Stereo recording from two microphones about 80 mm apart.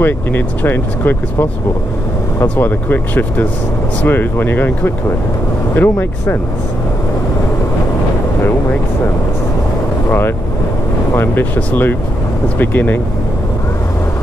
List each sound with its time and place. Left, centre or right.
0.0 s speech: left
2.6 s speech: left
10.0 s speech: left